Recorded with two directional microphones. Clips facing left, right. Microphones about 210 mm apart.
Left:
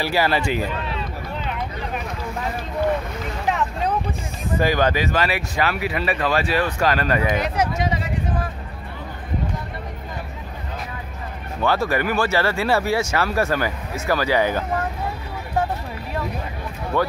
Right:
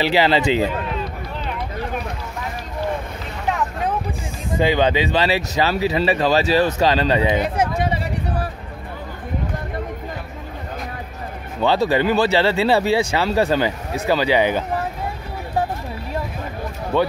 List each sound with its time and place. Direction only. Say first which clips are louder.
0.0 s speech: right 4 dB; 20° right (ahead or behind)
4.7 s speech: right 2 dB; 30° right (ahead or behind)
11.6 s speech: right 4 dB; 25° right (ahead or behind)